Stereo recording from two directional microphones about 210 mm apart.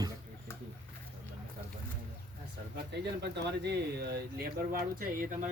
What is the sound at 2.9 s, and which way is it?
Speech, 55° right (ahead or behind).